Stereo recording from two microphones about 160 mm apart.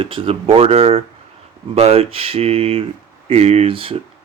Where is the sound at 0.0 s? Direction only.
35° right (ahead or behind).